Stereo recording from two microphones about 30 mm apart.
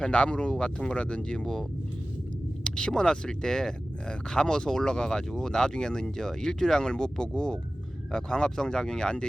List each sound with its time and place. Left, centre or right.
0.0 s speech: left
2.6 s speech: left
6.8 s speech: left